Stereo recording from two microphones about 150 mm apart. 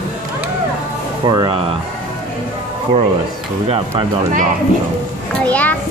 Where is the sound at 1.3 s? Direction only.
30° right (ahead or behind).